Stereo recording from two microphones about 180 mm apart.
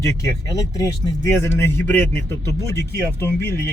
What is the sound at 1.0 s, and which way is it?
Speech, 15° left (ahead or behind).